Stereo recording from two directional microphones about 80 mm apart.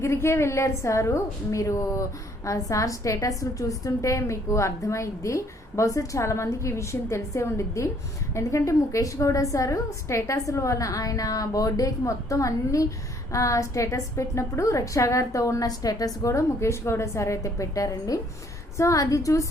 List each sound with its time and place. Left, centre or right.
0.0 s a woman's voice: left